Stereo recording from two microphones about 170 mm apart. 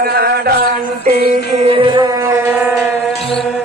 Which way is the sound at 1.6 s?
35° right (ahead or behind).